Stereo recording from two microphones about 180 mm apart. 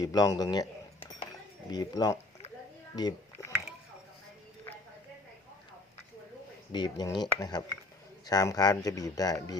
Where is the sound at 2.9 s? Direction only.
20° left (ahead or behind).